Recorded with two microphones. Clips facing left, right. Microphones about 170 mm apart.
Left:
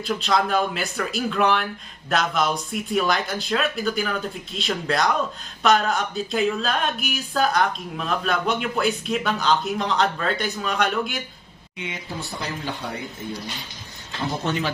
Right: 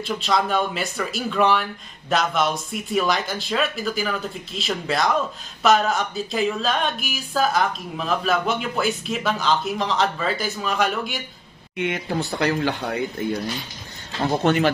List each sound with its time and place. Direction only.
0.0 s speech: centre (ahead or behind)
11.7 s speech: 60° right (ahead or behind)